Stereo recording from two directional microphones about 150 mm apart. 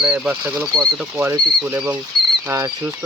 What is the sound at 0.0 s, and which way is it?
Speech, 10° right (ahead or behind).